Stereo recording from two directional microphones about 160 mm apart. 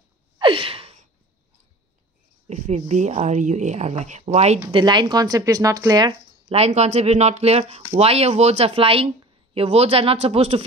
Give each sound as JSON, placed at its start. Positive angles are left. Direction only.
{"t": 0.4, "sound": "gasp", "side_deg": -35}
{"t": 2.4, "sound": "speech", "side_deg": -45}
{"t": 4.7, "sound": "speech", "side_deg": -30}
{"t": 6.5, "sound": "speech", "side_deg": -40}